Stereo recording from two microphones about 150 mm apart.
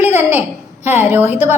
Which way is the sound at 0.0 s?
15° right (ahead or behind).